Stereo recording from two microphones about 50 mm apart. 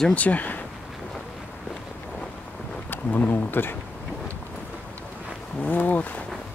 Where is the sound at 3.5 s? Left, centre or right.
Left.